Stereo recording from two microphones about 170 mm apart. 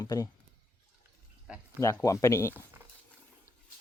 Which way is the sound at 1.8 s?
20° left (ahead or behind).